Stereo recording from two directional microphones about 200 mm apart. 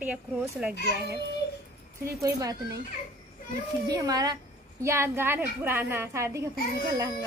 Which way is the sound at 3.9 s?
20° right (ahead or behind).